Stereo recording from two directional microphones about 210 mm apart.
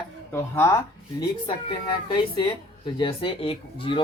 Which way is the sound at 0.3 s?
10° left (ahead or behind).